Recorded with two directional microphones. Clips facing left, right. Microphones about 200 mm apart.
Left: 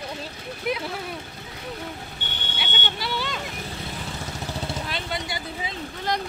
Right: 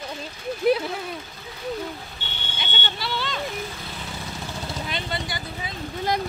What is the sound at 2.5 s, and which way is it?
Vehicle, 10° left (ahead or behind).